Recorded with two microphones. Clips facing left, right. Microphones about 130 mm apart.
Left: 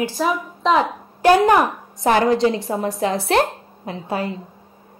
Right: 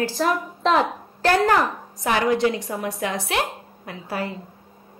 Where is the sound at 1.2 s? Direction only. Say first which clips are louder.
Left 5 dB; 15° left (ahead or behind).